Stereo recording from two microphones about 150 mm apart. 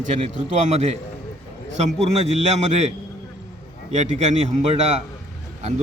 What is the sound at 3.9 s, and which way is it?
A man's voice, 50° right (ahead or behind).